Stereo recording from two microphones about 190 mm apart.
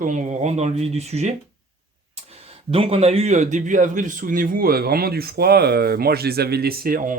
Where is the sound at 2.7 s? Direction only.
30° right (ahead or behind).